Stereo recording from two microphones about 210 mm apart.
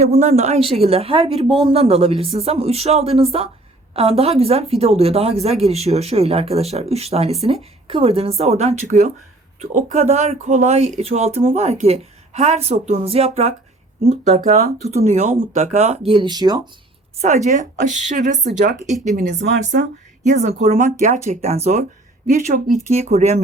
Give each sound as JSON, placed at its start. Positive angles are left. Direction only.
{"t": 0.1, "sound": "speech", "side_deg": -30}
{"t": 17.2, "sound": "speech", "side_deg": -35}